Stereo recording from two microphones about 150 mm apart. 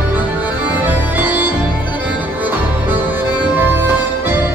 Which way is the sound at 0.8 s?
10° right (ahead or behind).